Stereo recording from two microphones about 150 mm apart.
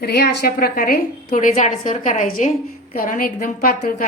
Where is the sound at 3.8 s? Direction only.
60° left (ahead or behind).